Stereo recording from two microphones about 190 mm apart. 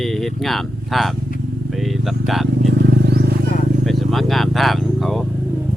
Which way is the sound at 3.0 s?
60° right (ahead or behind).